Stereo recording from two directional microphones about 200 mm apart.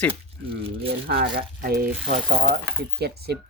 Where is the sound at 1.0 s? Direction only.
50° right (ahead or behind).